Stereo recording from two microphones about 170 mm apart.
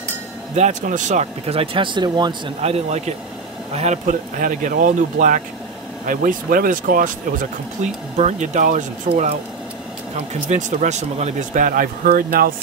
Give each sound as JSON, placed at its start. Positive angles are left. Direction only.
{"t": 0.6, "sound": "speech", "side_deg": -45}
{"t": 2.6, "sound": "speech", "side_deg": -40}
{"t": 10.5, "sound": "speech", "side_deg": -45}